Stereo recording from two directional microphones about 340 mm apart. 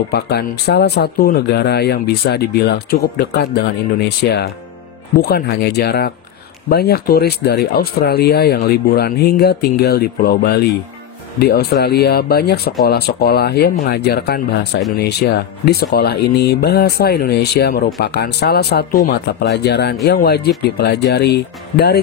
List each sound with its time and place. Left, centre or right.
0.1 s speech: left